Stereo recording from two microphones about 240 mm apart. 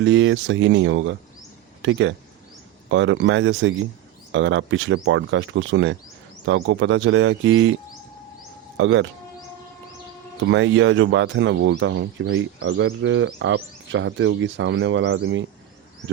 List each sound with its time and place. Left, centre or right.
0.0 s speech: right
8.8 s speech: right
10.4 s speech: right